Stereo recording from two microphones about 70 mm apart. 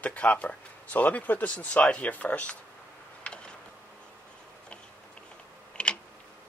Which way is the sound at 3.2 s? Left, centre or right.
Centre.